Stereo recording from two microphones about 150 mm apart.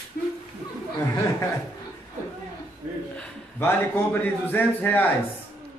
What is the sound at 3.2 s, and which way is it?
A man's voice, 15° left (ahead or behind).